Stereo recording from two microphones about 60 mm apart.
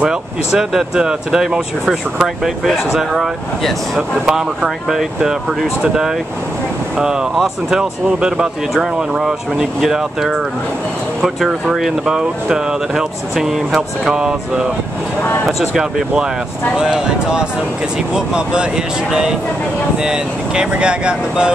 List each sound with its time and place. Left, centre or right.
0.0 s speech: centre
4.3 s speech: centre
20.0 s speech: centre